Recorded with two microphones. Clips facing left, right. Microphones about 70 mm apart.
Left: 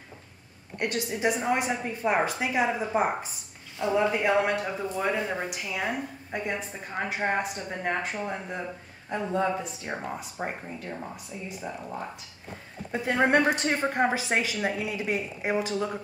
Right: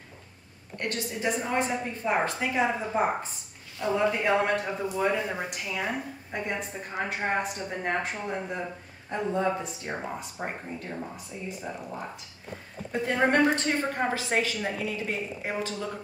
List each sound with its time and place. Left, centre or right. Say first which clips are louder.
0.7 s a woman's voice: left 3 dB; centre
4.2 s a woman's voice: left 1 dB; centre
13.0 s a woman's voice: left 1 dB; centre